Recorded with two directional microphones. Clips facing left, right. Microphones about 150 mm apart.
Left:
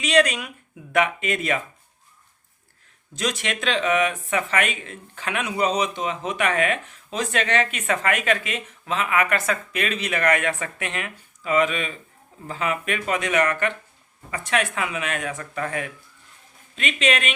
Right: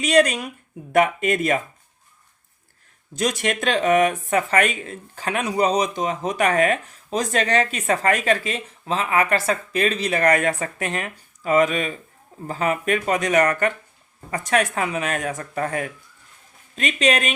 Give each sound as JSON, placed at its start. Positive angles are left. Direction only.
{"t": 0.0, "sound": "speech", "side_deg": -45}
{"t": 3.2, "sound": "speech", "side_deg": -45}